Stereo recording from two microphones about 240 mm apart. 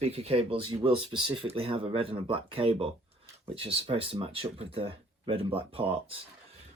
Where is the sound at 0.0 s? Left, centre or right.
Right.